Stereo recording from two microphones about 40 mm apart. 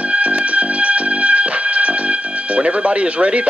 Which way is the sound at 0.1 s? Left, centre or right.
Right.